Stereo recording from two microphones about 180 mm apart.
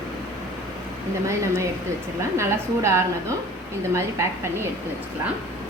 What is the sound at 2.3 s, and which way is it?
A woman's voice, 15° right (ahead or behind).